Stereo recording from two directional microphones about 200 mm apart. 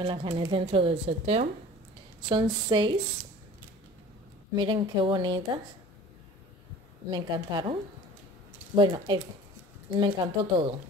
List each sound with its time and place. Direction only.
0.0 s speech: 25° right (ahead or behind)
4.6 s speech: 20° right (ahead or behind)
7.1 s speech: 20° right (ahead or behind)
8.7 s speech: 20° right (ahead or behind)